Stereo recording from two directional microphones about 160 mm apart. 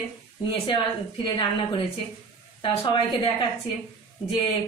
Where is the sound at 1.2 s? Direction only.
30° left (ahead or behind).